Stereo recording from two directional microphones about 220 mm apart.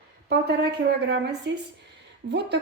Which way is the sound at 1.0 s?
50° right (ahead or behind).